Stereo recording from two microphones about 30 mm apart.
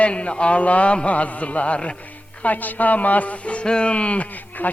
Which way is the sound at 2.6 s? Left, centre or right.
Left.